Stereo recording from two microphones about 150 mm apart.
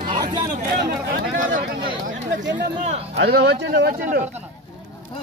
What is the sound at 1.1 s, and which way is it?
Speech, 75° right (ahead or behind).